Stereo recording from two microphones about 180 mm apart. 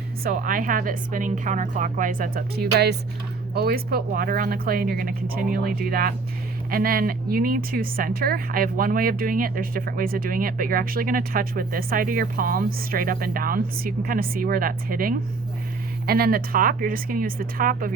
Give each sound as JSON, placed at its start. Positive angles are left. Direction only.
{"t": 0.2, "sound": "speech", "side_deg": -55}